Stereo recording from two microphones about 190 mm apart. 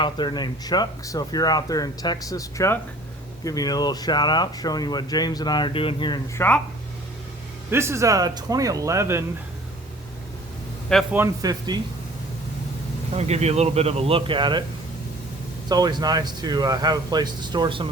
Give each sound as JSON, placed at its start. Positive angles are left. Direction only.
{"t": 0.0, "sound": "speech", "side_deg": 25}
{"t": 6.3, "sound": "speech", "side_deg": 10}
{"t": 7.7, "sound": "speech", "side_deg": -15}
{"t": 11.1, "sound": "speech", "side_deg": -10}
{"t": 13.1, "sound": "speech", "side_deg": -35}
{"t": 15.7, "sound": "speech", "side_deg": -20}